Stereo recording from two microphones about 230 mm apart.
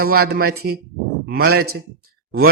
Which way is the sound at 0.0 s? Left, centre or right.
Right.